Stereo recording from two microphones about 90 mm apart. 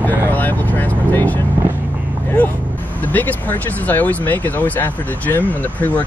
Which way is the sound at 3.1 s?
20° left (ahead or behind).